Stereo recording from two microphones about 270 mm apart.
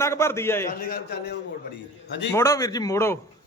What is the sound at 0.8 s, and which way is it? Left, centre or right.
Speech, left.